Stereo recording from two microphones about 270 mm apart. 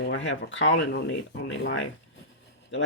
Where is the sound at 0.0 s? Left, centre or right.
Left.